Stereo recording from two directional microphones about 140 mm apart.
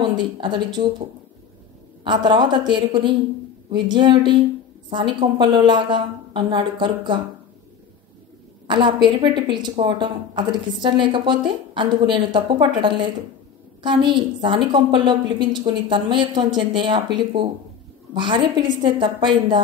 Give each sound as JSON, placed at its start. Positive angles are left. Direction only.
{"t": 0.0, "sound": "a woman's voice", "side_deg": -35}
{"t": 2.0, "sound": "a woman's voice", "side_deg": -35}
{"t": 8.6, "sound": "a woman's voice", "side_deg": -35}